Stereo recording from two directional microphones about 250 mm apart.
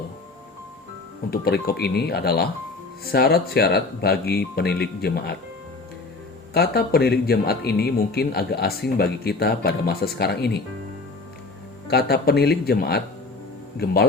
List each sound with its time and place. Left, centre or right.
1.3 s a man's voice: left
6.5 s a man's voice: left
11.9 s a man's voice: left